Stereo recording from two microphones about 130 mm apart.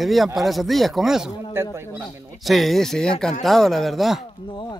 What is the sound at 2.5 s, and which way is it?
Speech, centre (ahead or behind).